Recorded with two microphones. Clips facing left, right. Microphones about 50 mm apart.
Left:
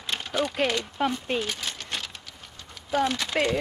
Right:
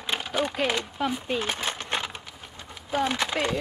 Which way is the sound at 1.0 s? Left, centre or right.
Centre.